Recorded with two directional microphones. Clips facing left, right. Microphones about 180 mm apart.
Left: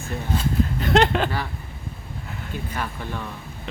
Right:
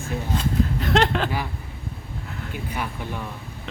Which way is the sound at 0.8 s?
Centre (ahead or behind).